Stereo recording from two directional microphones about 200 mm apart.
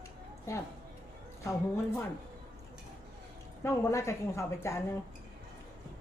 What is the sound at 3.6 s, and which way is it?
A woman's voice, 15° left (ahead or behind).